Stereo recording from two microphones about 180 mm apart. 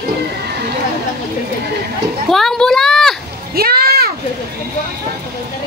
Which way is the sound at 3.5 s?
55° right (ahead or behind).